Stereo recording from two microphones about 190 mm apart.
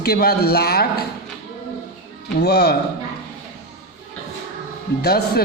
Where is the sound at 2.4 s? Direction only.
60° left (ahead or behind).